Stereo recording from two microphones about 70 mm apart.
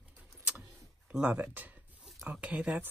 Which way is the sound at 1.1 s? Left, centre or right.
Centre.